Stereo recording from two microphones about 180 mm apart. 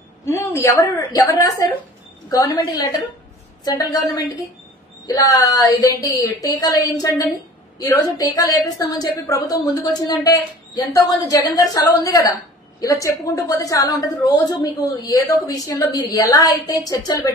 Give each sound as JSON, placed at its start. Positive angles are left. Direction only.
{"t": 0.2, "sound": "a woman's voice", "side_deg": 15}
{"t": 5.0, "sound": "a woman's voice", "side_deg": 20}